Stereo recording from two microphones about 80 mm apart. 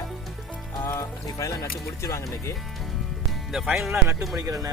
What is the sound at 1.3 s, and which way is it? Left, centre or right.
Speech, left.